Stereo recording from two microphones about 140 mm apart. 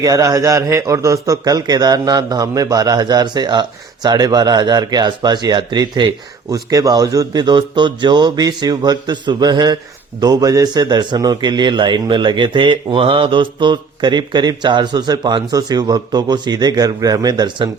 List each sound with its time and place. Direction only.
0.0 s a man's voice: 25° right (ahead or behind)